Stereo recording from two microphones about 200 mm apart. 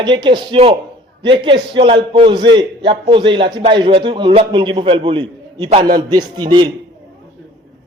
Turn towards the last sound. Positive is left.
turn(degrees=-20)  # may be behind; listen again after turning